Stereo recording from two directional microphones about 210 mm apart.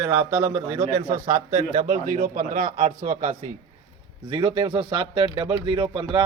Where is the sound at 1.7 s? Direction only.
40° right (ahead or behind).